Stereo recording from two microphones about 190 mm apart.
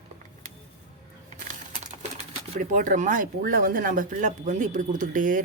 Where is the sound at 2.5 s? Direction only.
45° right (ahead or behind).